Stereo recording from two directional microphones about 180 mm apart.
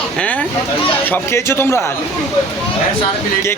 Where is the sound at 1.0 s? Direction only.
10° left (ahead or behind).